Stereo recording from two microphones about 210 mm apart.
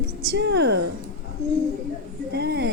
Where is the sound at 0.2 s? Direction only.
50° right (ahead or behind).